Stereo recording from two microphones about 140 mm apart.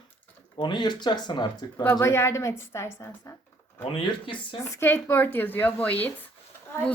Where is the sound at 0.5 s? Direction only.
30° left (ahead or behind).